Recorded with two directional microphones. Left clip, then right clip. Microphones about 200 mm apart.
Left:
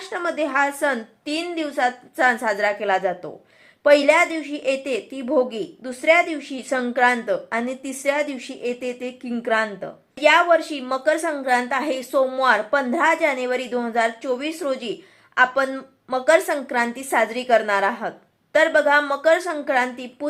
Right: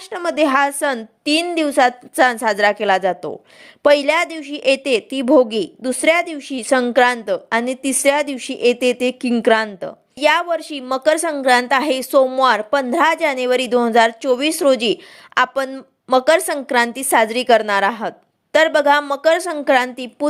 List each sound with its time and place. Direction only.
0.0 s a woman's voice: 40° right (ahead or behind)